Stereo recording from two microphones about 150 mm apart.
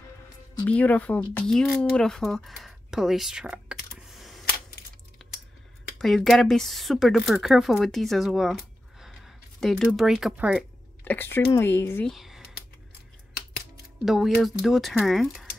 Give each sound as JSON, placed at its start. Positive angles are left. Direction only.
{"t": 0.7, "sound": "speech", "side_deg": 10}
{"t": 5.2, "sound": "a sound", "side_deg": 0}
{"t": 5.9, "sound": "speech", "side_deg": 0}
{"t": 9.0, "sound": "a sound", "side_deg": 0}
{"t": 11.1, "sound": "speech", "side_deg": 15}
{"t": 12.1, "sound": "speech", "side_deg": 0}
{"t": 14.0, "sound": "speech", "side_deg": 0}